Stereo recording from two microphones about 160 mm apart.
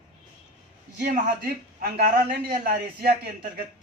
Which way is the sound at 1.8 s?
75° right (ahead or behind).